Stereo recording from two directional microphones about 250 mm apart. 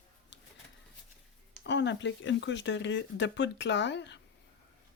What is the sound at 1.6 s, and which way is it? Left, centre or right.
Speech, left.